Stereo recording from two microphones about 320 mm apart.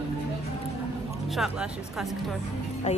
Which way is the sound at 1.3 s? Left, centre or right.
Centre.